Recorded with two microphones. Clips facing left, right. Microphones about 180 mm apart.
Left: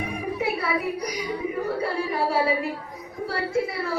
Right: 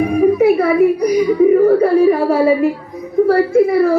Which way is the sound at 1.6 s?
50° right (ahead or behind).